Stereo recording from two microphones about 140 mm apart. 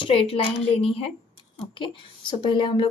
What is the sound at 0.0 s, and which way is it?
A woman's voice, 40° left (ahead or behind).